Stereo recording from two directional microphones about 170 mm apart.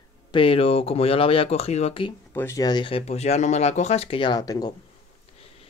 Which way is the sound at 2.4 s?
15° left (ahead or behind).